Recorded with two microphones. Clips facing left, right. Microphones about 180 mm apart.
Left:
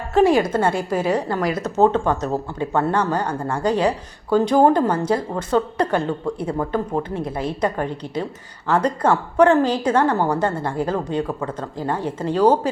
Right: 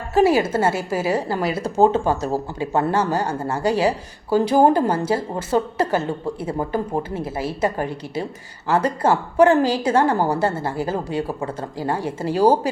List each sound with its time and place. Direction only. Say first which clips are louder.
0.1 s a woman's voice: left 1 dB; 5° right (ahead or behind)